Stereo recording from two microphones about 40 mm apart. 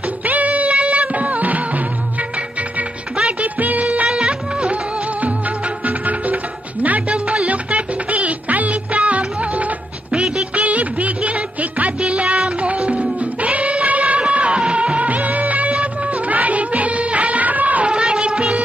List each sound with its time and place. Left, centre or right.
0.2 s music: right
3.2 s music: right
3.5 s music: right
4.1 s music: right
5.9 s music: right
17.8 s music: right